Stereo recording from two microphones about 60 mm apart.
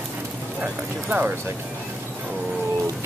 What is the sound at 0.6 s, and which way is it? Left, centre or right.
Speech, right.